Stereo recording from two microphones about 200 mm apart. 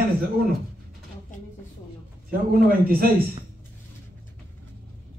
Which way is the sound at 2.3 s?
50° right (ahead or behind).